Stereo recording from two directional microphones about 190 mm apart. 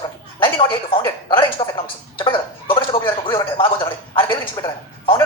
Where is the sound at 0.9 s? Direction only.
25° left (ahead or behind).